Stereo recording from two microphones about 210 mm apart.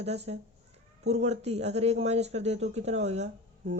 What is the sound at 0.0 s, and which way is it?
Speech, 30° right (ahead or behind).